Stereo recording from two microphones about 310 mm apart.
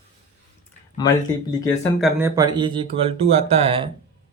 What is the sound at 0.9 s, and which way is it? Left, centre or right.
Speech, centre.